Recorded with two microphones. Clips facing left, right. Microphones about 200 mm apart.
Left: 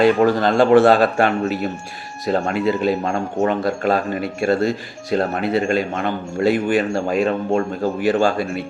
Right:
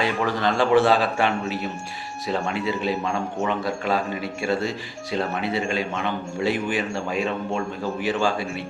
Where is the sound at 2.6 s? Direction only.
Centre (ahead or behind).